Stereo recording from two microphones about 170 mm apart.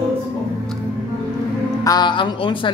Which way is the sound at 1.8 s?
25° left (ahead or behind).